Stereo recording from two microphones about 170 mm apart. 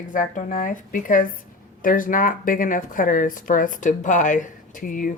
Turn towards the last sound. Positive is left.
turn(degrees=50)  # may be behind; listen again after turning